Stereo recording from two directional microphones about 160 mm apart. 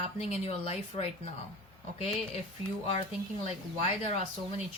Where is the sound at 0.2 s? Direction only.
40° left (ahead or behind).